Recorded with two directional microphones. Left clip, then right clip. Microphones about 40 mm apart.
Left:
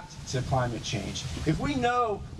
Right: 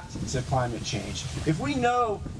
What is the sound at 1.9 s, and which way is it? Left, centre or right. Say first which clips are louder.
Speech: right 2 dB; left.